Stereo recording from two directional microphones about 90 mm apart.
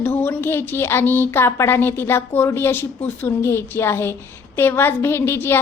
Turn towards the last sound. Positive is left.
turn(degrees=25)  # may be behind; listen again after turning